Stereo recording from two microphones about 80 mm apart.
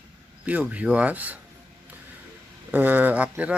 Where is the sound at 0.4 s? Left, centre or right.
Centre.